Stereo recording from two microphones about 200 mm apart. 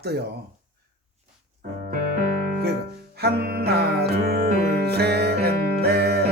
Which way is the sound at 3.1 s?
55° right (ahead or behind).